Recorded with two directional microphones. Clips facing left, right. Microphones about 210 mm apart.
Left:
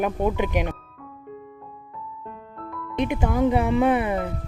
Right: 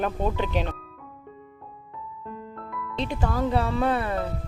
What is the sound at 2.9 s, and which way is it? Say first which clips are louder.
Speech: left 5 dB; 15° left (ahead or behind).